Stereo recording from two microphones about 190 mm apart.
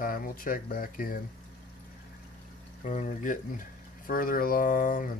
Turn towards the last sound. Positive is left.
turn(degrees=45)  # may be behind; listen again after turning